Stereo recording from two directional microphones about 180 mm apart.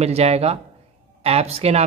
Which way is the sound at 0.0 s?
35° right (ahead or behind).